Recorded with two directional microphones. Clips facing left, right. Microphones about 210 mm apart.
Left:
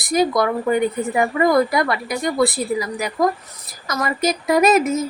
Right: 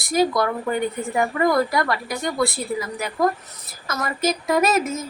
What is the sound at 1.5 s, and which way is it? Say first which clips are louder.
A woman's voice: left 3 dB; 20° left (ahead or behind).